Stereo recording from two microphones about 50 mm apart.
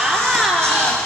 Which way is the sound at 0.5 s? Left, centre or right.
Centre.